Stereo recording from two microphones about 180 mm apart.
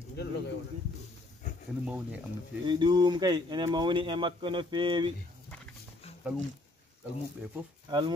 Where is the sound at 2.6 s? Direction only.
25° right (ahead or behind).